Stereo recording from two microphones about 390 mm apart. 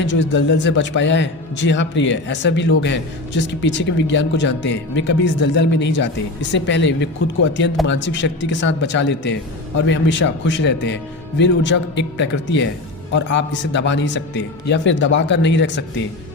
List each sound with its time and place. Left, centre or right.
0.0 s speech: left